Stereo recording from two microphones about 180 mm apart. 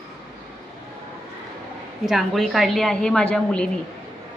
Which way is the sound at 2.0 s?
Centre (ahead or behind).